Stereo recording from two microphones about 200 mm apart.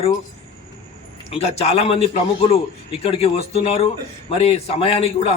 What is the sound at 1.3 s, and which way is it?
A man's voice, 30° left (ahead or behind).